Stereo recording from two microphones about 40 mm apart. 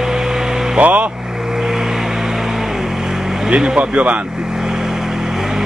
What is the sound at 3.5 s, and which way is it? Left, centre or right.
Speech, right.